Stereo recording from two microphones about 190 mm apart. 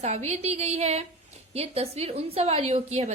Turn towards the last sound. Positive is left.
turn(degrees=-35)  # may be behind; listen again after turning